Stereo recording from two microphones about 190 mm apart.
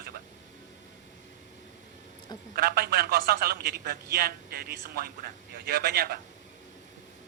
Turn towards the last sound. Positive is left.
turn(degrees=-55)  # may be behind; listen again after turning